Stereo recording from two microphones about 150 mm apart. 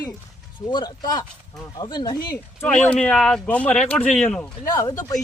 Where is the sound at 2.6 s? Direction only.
10° left (ahead or behind).